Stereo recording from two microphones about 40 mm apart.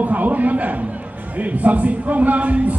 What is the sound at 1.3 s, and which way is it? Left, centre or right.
A man's voice, right.